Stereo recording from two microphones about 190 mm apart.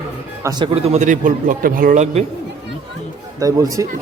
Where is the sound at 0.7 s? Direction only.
35° right (ahead or behind).